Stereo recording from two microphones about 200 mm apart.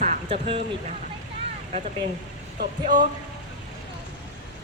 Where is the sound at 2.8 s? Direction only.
40° right (ahead or behind).